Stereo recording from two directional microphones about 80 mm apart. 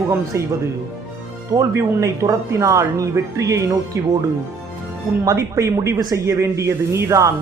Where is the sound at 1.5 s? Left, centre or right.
Right.